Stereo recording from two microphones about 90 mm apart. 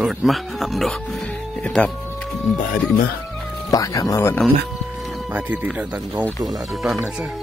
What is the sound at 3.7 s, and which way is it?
Speech, 40° left (ahead or behind).